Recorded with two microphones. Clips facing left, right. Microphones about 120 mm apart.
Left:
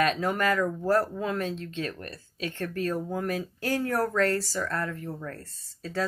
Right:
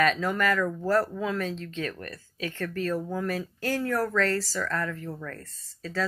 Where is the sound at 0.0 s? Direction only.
45° left (ahead or behind); by 2.5 s 25° left (ahead or behind).